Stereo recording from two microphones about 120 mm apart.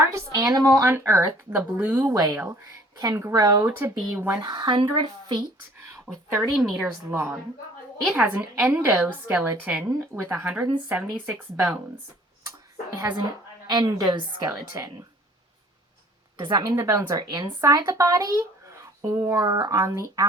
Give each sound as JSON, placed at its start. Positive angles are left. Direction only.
{"t": 0.0, "sound": "speech", "side_deg": -25}
{"t": 2.1, "sound": "speech", "side_deg": -30}
{"t": 3.7, "sound": "speech", "side_deg": -20}
{"t": 4.4, "sound": "speech", "side_deg": -35}
{"t": 6.5, "sound": "a woman's voice", "side_deg": -5}
{"t": 7.1, "sound": "speech", "side_deg": -20}
{"t": 10.4, "sound": "speech", "side_deg": -10}
{"t": 12.5, "sound": "a sound", "side_deg": -25}
{"t": 13.7, "sound": "speech", "side_deg": -35}
{"t": 16.5, "sound": "speech", "side_deg": -30}
{"t": 19.4, "sound": "speech", "side_deg": -35}